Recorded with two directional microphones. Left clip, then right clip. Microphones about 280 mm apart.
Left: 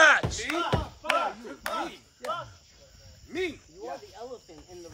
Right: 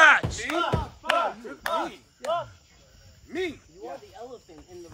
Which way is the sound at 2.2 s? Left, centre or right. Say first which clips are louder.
Right 6 dB; right.